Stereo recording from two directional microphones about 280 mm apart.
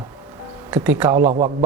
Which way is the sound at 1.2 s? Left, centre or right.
Right.